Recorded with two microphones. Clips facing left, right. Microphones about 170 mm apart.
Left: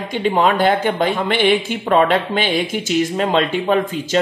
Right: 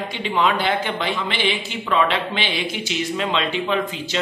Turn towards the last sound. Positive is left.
turn(degrees=45)  # may be behind; listen again after turning